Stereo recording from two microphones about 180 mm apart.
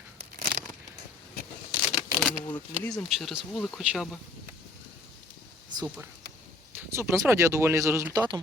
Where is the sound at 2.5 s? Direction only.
10° left (ahead or behind).